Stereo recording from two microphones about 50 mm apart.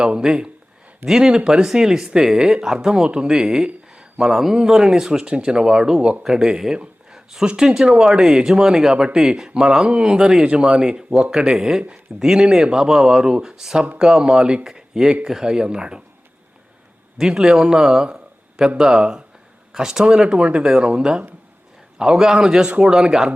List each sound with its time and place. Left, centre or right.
0.0 s speech: centre
17.2 s a man's voice: centre